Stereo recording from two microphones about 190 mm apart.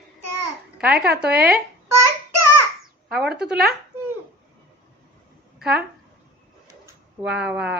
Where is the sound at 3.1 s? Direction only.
5° right (ahead or behind).